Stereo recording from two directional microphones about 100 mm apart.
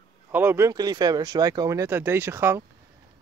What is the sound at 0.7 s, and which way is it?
Speech, 40° right (ahead or behind).